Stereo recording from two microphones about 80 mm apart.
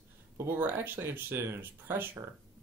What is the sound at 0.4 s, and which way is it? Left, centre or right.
Speech, right.